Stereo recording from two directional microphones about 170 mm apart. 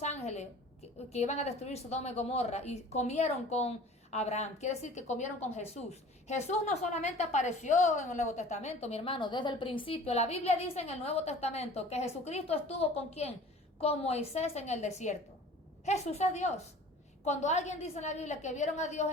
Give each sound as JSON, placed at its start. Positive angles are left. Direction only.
{"t": 0.0, "sound": "a woman's voice", "side_deg": 40}